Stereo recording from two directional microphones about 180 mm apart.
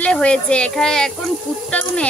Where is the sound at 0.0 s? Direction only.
5° left (ahead or behind).